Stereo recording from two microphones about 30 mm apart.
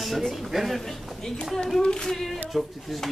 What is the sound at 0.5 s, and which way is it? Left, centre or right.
Speech, centre.